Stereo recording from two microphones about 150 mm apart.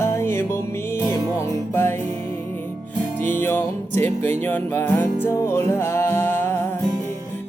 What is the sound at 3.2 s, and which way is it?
Music, 15° left (ahead or behind).